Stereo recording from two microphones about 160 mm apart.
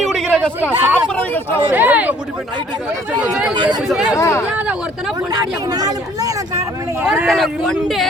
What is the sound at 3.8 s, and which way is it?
Speech, centre (ahead or behind).